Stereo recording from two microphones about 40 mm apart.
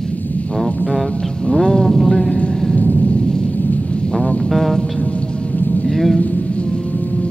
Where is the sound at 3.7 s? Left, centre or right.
Left.